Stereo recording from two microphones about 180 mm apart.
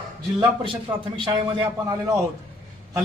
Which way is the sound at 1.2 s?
25° right (ahead or behind).